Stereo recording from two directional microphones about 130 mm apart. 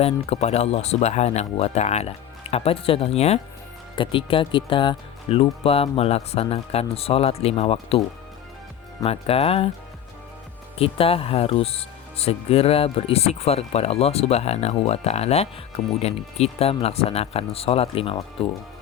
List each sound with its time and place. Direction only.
0.0 s speech: 55° left (ahead or behind)
3.9 s speech: 40° left (ahead or behind)
9.0 s speech: 50° left (ahead or behind)
10.8 s speech: 45° left (ahead or behind)